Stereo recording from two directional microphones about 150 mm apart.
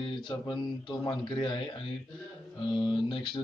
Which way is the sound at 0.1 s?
30° left (ahead or behind).